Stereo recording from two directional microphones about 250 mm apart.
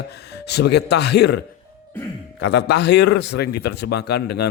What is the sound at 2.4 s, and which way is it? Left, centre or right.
A man's voice, left.